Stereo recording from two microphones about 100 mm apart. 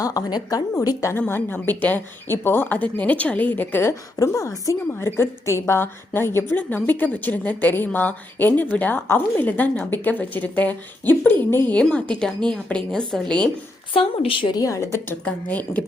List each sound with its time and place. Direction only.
0.0 s a woman's voice: 35° left (ahead or behind)
1.3 s a woman's voice: 20° left (ahead or behind)
13.9 s a woman's voice: 65° left (ahead or behind)
14.5 s a woman's voice: 35° left (ahead or behind)
15.2 s speech: 15° left (ahead or behind)